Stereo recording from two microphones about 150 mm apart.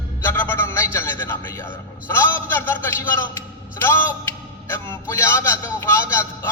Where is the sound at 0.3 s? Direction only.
15° left (ahead or behind).